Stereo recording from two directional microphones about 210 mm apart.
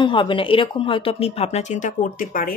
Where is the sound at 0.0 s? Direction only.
25° left (ahead or behind).